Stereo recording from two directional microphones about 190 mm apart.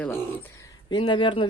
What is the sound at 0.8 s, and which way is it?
Speech, 25° left (ahead or behind).